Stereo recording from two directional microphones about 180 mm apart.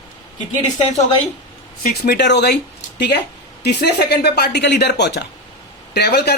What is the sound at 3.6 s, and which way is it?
A woman's voice, 65° left (ahead or behind).